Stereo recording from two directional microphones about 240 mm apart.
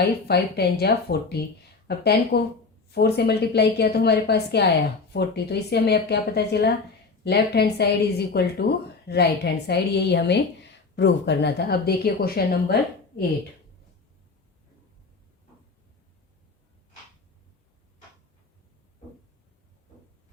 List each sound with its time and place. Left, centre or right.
0.0 s a woman's voice: left